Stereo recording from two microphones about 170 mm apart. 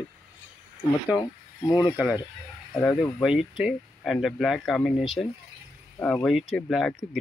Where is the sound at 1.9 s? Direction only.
5° right (ahead or behind).